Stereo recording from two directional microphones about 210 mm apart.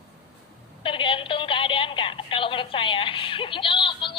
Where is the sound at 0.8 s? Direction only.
25° left (ahead or behind).